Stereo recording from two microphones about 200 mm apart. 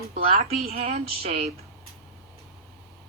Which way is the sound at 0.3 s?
45° right (ahead or behind).